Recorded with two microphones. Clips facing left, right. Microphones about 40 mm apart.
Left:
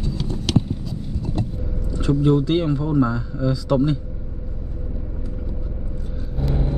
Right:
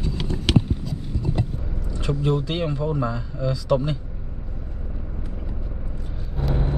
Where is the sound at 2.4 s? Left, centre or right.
Centre.